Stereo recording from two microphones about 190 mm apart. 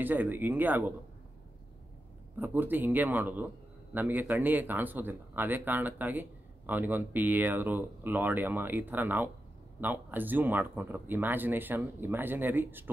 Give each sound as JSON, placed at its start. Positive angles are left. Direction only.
{"t": 0.0, "sound": "a man's voice", "side_deg": -10}
{"t": 2.4, "sound": "a man's voice", "side_deg": -10}